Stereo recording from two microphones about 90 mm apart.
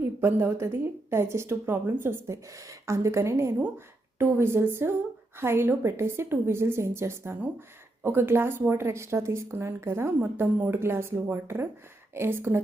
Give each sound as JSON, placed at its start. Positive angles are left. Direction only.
{"t": 0.0, "sound": "a woman's voice", "side_deg": -25}